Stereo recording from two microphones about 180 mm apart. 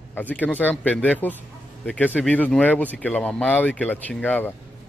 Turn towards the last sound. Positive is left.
turn(degrees=10)  # may be behind; listen again after turning